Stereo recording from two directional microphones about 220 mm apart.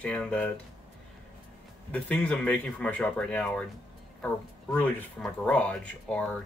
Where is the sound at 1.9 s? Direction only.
5° left (ahead or behind).